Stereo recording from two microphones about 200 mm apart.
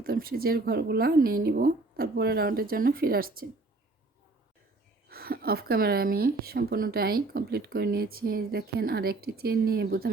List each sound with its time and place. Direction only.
0.0 s speech: 50° right (ahead or behind)
5.0 s speech: 50° right (ahead or behind)